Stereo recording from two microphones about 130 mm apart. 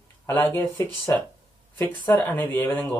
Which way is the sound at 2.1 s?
15° left (ahead or behind).